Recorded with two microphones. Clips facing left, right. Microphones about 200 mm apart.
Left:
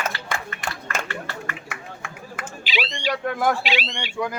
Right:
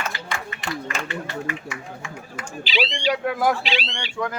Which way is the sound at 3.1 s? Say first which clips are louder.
Left 1 dB; 5° right (ahead or behind).